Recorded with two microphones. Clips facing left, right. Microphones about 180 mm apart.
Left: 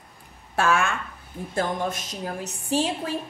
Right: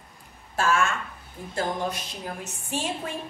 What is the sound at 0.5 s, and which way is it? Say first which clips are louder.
Speech: left 1 dB; 60° left (ahead or behind).